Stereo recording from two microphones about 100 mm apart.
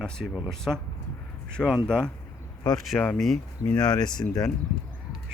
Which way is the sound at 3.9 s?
45° left (ahead or behind).